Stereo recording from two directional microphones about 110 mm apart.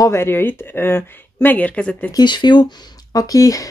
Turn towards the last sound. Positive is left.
turn(degrees=30)  # may be behind; listen again after turning